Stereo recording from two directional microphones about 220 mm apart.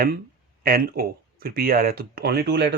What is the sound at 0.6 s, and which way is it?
Speech, 40° right (ahead or behind).